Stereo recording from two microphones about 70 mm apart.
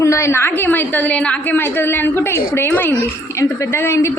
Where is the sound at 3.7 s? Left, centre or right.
Left.